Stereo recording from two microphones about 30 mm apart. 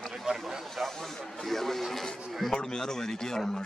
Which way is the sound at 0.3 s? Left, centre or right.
Right.